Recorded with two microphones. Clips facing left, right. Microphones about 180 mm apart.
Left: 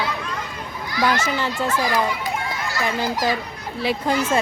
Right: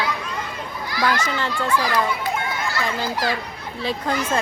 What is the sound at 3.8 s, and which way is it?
Speech, 10° left (ahead or behind).